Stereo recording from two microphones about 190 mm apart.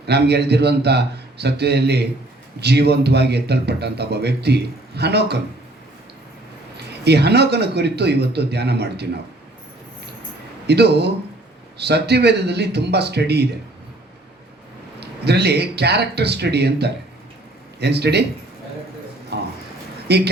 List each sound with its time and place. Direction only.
0.0 s a man's voice: 60° right (ahead or behind)
7.0 s a man's voice: 60° right (ahead or behind)
10.7 s a man's voice: 60° right (ahead or behind)
15.0 s a man's voice: 60° right (ahead or behind)
19.3 s a sound: 60° right (ahead or behind)
20.1 s a man's voice: 60° right (ahead or behind)